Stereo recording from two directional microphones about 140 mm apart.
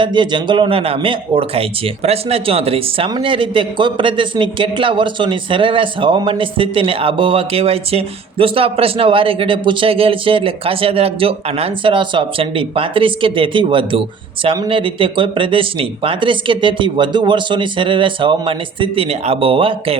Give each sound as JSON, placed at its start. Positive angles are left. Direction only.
{"t": 0.0, "sound": "a man's voice", "side_deg": -35}